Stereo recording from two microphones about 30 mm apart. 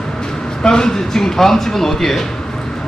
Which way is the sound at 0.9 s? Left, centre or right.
Centre.